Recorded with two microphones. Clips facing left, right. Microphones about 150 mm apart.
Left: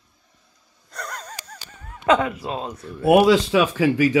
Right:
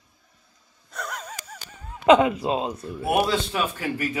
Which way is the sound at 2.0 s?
20° right (ahead or behind).